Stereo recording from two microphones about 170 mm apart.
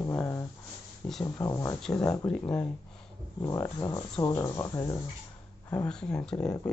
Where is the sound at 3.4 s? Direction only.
20° left (ahead or behind).